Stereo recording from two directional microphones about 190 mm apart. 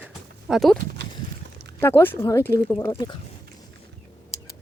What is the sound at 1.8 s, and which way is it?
Speech, 10° left (ahead or behind).